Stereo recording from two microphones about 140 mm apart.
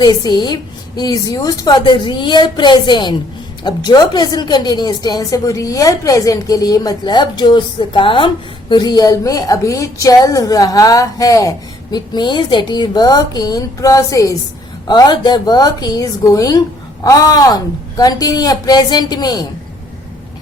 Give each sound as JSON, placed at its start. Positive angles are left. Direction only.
{"t": 0.0, "sound": "a woman's voice", "side_deg": 30}